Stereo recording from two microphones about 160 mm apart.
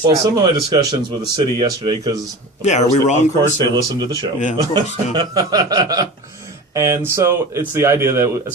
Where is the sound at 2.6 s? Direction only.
45° left (ahead or behind).